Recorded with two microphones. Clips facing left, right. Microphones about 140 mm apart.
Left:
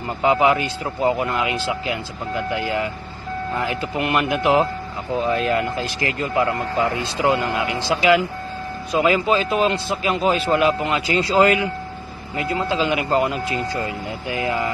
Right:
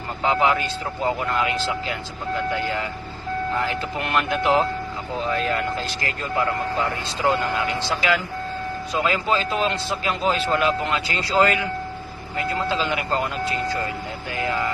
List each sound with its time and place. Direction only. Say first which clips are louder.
0.2 s a man's voice: left 3 dB; 15° left (ahead or behind)
3.6 s a man's voice: left 3 dB; 10° left (ahead or behind)